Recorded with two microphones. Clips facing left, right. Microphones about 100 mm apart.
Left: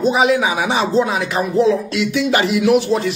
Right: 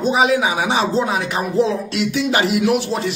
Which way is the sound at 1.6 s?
35° right (ahead or behind).